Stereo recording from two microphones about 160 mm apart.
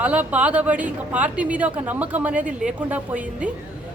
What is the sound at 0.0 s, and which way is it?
A woman's voice, 10° right (ahead or behind).